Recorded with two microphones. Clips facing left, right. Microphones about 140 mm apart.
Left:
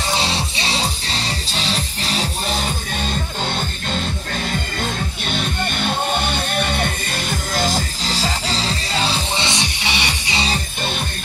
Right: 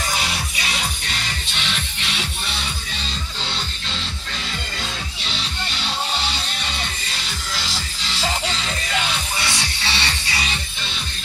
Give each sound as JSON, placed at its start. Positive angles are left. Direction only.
{"t": 0.1, "sound": "music", "side_deg": 30}
{"t": 5.2, "sound": "music", "side_deg": 50}